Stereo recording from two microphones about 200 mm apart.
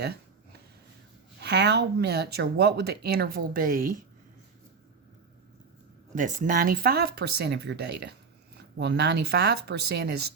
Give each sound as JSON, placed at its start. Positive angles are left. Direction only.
{"t": 1.4, "sound": "speech", "side_deg": -55}
{"t": 6.1, "sound": "speech", "side_deg": -40}